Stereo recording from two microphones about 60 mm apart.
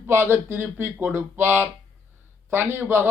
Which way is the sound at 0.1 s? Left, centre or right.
Right.